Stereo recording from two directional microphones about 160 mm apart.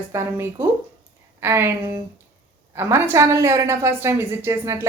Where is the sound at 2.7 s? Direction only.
15° right (ahead or behind).